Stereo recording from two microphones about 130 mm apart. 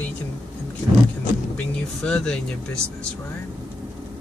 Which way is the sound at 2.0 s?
5° left (ahead or behind).